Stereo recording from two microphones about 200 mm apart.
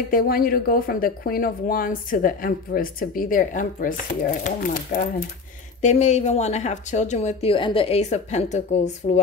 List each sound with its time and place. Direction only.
0.1 s speech: 45° left (ahead or behind)